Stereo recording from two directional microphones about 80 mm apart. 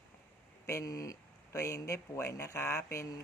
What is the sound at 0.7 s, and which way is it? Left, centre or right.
Speech, left.